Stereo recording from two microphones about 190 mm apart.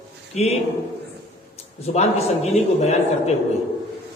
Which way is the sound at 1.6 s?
35° left (ahead or behind).